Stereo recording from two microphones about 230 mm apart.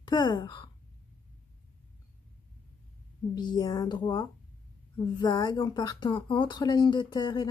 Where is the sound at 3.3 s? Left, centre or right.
Centre.